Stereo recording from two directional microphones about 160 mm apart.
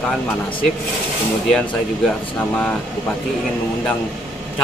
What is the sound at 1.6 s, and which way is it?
Speech, 10° left (ahead or behind).